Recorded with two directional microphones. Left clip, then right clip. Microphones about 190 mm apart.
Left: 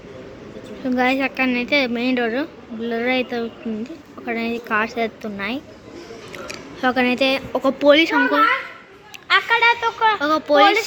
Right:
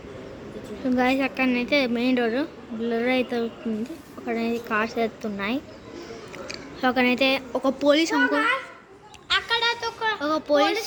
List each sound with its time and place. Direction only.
0.9 s a woman's voice: 10° right (ahead or behind)
6.3 s speech: centre (ahead or behind)
9.3 s a sound: 20° left (ahead or behind)
10.2 s speech: centre (ahead or behind)